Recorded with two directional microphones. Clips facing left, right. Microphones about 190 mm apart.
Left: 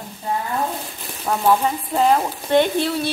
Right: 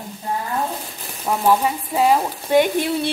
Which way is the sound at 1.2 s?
5° right (ahead or behind).